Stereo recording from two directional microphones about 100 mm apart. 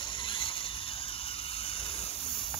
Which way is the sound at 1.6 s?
70° left (ahead or behind).